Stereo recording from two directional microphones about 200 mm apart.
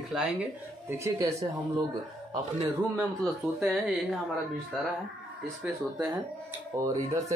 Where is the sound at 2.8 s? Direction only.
5° right (ahead or behind).